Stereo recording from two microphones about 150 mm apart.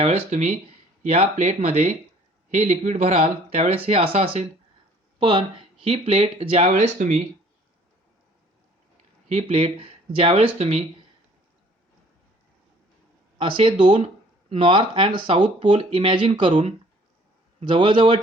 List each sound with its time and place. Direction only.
0.0 s speech: 45° right (ahead or behind)
5.8 s speech: 40° right (ahead or behind)
9.3 s speech: 40° right (ahead or behind)
13.4 s speech: 35° right (ahead or behind)